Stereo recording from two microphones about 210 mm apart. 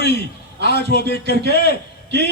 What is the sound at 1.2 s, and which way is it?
A man's voice, 55° right (ahead or behind).